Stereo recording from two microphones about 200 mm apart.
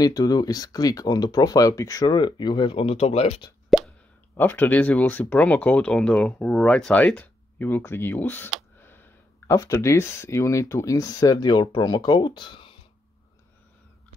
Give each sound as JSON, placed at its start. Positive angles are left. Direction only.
{"t": 0.0, "sound": "speech", "side_deg": 20}
{"t": 4.4, "sound": "speech", "side_deg": 10}